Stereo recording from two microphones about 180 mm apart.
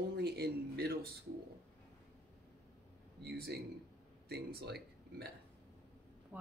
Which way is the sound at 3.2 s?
60° right (ahead or behind).